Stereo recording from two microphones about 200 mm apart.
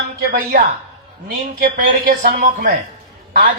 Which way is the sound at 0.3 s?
45° right (ahead or behind).